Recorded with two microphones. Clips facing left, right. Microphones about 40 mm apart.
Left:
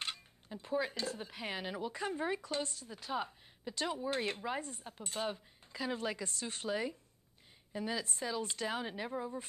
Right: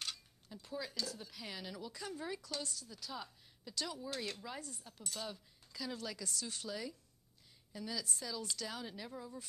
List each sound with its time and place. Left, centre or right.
0.0 s speech: left